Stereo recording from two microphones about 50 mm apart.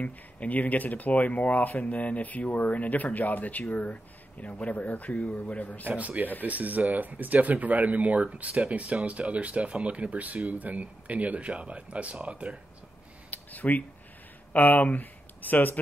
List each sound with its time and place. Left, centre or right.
0.0 s speech: left
5.9 s speech: right
13.3 s a sound: left
14.5 s speech: left